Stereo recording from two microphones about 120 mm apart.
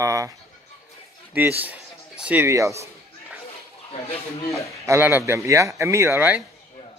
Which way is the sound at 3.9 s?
55° left (ahead or behind).